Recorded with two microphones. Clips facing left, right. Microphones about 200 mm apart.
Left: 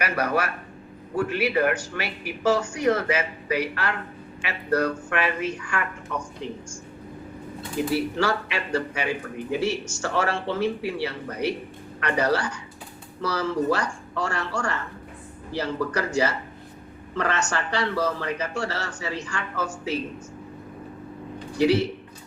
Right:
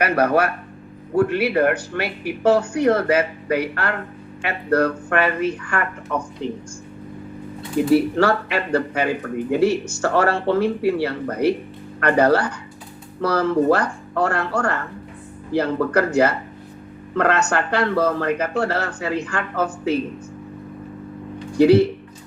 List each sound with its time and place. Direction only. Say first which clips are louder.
0.0 s speech: right 7 dB; 55° right (ahead or behind)
7.9 s speech: right 8 dB; 55° right (ahead or behind)
21.6 s speech: right 8 dB; 55° right (ahead or behind)